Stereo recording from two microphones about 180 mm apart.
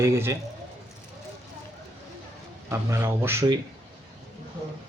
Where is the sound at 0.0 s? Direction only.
15° right (ahead or behind).